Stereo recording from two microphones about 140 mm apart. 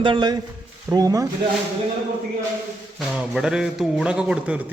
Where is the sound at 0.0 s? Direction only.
35° right (ahead or behind).